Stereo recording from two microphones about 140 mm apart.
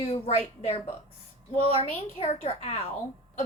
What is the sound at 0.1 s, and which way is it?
A woman's voice, 50° left (ahead or behind).